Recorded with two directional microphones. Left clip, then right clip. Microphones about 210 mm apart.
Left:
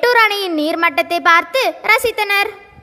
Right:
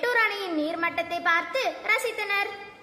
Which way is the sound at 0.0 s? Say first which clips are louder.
Left 12 dB; 45° left (ahead or behind).